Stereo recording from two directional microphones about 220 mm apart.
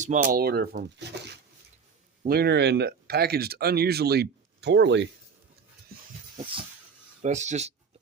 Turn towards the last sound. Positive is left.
turn(degrees=-30)  # may be behind; listen again after turning